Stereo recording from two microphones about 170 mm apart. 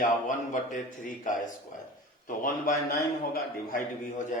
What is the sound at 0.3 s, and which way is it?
A man's voice, 50° left (ahead or behind).